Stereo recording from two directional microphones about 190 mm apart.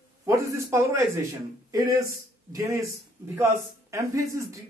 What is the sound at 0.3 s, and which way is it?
A man's voice, 15° right (ahead or behind).